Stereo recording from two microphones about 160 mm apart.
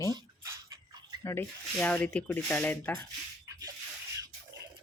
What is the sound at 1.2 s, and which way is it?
Speech, 15° left (ahead or behind).